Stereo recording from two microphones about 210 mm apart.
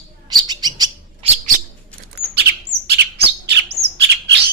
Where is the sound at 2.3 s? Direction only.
50° right (ahead or behind).